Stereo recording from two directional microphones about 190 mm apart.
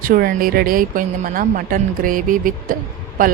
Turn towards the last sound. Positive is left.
turn(degrees=-45)  # may be behind; listen again after turning